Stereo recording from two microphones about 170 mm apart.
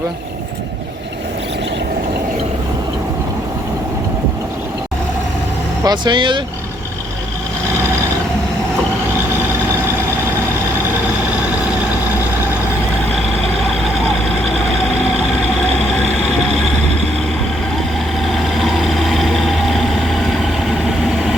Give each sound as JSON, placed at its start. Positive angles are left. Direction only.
{"t": 5.8, "sound": "speech", "side_deg": -25}
{"t": 18.3, "sound": "vehicle", "side_deg": 0}